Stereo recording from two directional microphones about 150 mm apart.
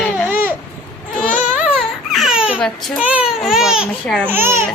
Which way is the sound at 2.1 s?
Centre (ahead or behind).